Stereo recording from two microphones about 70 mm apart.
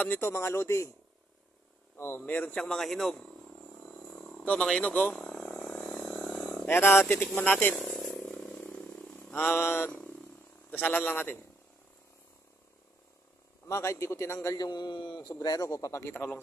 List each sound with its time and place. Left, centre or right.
0.0 s speech: left
2.0 s a man's voice: left
2.6 s a sound: centre
4.8 s a man's voice: centre
5.2 s frog: centre
6.7 s a man's voice: left
7.9 s a sound: centre
9.1 s a sound: left
9.9 s purr: centre
10.7 s a man's voice: left
13.7 s a man's voice: left
15.9 s speech: left
16.1 s a man's voice: left